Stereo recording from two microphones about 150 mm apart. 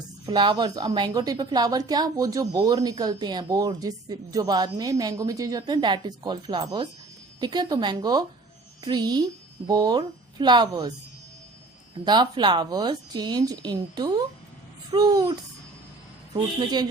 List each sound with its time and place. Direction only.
0.3 s a woman's voice: 30° right (ahead or behind)
11.9 s a woman's voice: 30° right (ahead or behind)
16.3 s a woman's voice: 30° right (ahead or behind)